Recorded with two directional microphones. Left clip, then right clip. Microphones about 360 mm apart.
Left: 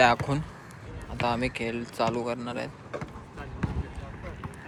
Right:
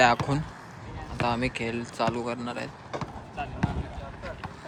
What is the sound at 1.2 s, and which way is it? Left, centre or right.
A man's voice, centre.